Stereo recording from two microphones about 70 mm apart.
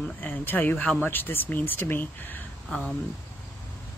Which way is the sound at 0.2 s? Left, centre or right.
Left.